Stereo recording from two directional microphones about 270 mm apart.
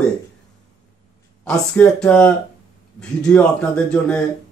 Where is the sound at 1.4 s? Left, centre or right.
Centre.